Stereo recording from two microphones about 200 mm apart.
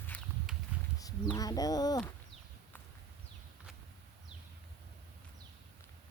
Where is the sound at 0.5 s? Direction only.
Centre (ahead or behind).